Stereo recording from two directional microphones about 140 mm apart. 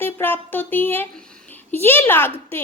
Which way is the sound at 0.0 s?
15° left (ahead or behind).